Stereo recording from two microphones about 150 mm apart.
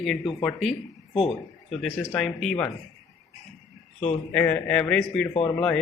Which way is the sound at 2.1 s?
5° left (ahead or behind).